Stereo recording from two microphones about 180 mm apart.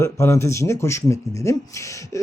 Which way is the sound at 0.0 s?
15° left (ahead or behind).